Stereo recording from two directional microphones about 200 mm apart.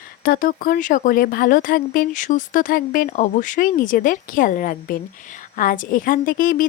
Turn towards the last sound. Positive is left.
turn(degrees=45)  # may be behind; listen again after turning